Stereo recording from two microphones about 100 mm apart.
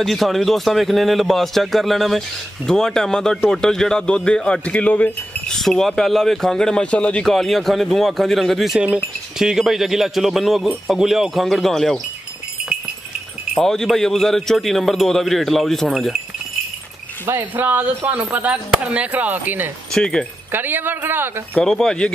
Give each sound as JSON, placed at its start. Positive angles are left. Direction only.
{"t": 0.0, "sound": "a man's voice", "side_deg": 0}
{"t": 5.5, "sound": "a man's voice", "side_deg": 5}
{"t": 13.6, "sound": "a man's voice", "side_deg": 5}
{"t": 17.3, "sound": "speech", "side_deg": -20}
{"t": 19.9, "sound": "speech", "side_deg": 10}
{"t": 20.5, "sound": "speech", "side_deg": -20}
{"t": 21.5, "sound": "speech", "side_deg": 5}